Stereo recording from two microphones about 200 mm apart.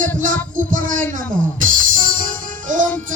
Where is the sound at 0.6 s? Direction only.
40° right (ahead or behind).